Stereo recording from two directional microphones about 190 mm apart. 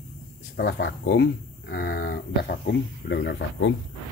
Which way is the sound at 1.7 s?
55° left (ahead or behind).